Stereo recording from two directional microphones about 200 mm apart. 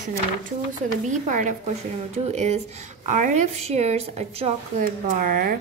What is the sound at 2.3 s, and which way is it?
A woman's voice, 35° right (ahead or behind).